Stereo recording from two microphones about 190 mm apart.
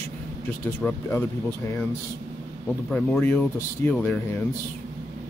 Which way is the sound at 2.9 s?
5° left (ahead or behind).